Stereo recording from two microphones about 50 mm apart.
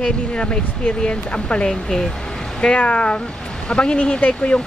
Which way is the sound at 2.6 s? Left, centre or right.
Left.